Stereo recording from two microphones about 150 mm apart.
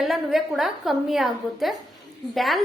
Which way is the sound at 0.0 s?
Centre (ahead or behind).